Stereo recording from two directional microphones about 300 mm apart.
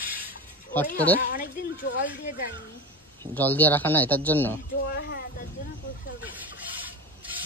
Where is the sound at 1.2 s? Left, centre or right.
Left.